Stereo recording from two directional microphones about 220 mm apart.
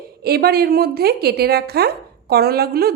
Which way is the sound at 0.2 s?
45° right (ahead or behind).